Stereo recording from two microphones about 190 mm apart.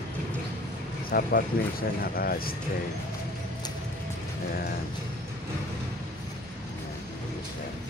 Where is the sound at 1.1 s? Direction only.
50° left (ahead or behind).